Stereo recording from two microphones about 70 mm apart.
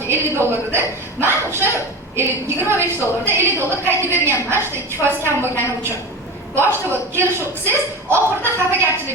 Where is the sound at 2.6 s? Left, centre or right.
Right.